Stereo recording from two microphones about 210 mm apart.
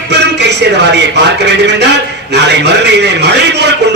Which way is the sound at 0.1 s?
55° right (ahead or behind).